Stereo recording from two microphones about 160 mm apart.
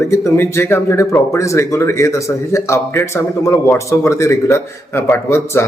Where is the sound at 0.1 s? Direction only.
15° left (ahead or behind).